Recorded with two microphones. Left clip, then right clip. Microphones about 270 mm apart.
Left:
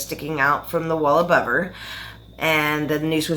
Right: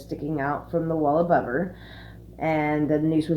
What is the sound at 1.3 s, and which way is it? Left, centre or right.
Speech, centre.